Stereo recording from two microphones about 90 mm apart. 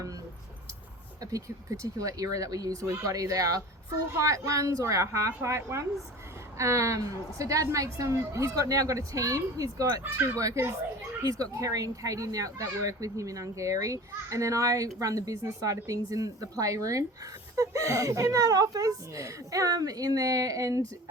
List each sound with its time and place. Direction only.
1.2 s a woman's voice: 40° right (ahead or behind)